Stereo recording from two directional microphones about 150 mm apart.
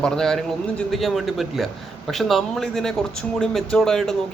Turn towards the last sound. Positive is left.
turn(degrees=5)  # may be behind; listen again after turning